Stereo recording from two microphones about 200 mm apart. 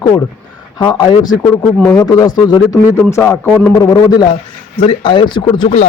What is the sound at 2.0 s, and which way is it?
A man's voice, 20° left (ahead or behind).